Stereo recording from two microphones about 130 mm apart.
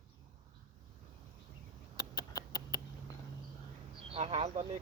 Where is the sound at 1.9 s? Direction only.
30° left (ahead or behind).